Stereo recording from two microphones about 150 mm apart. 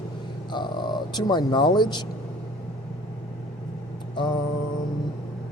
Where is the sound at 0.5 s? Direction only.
30° left (ahead or behind).